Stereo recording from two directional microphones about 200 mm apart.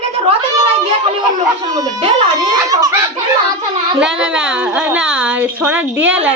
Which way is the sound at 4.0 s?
5° right (ahead or behind).